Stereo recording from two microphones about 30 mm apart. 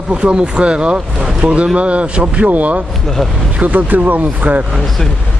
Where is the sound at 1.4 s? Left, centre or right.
Right.